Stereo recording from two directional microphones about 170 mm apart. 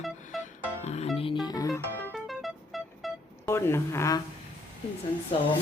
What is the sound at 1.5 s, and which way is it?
Music, 20° left (ahead or behind).